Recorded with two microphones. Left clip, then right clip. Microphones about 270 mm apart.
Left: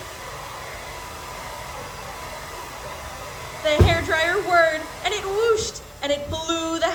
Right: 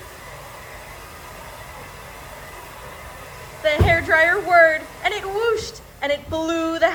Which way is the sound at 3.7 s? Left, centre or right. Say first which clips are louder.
Right 3 dB; right.